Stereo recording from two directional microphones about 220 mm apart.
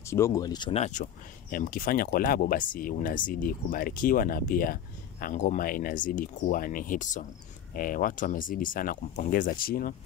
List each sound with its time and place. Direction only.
0.0 s speech: 15° left (ahead or behind); by 9.9 s 40° left (ahead or behind)